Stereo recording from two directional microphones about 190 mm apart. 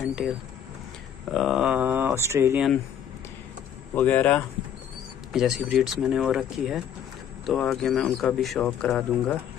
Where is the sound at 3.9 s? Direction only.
10° left (ahead or behind).